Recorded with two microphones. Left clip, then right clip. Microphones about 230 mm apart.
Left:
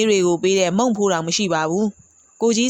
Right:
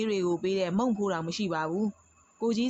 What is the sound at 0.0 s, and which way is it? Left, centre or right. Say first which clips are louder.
Speech: left 12 dB; left.